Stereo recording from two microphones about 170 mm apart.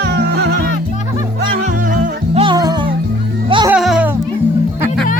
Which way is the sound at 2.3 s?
25° right (ahead or behind).